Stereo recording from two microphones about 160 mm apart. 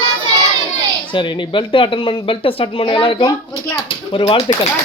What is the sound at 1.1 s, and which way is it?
Speech, 30° left (ahead or behind).